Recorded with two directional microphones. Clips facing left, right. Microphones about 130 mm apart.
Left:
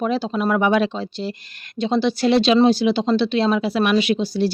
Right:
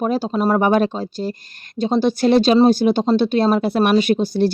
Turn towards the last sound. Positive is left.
turn(degrees=-50)  # may be behind; listen again after turning